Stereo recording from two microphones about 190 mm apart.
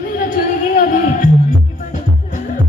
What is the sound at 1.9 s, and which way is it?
Music, 40° left (ahead or behind).